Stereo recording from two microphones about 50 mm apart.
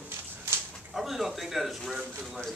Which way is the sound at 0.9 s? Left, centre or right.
Centre.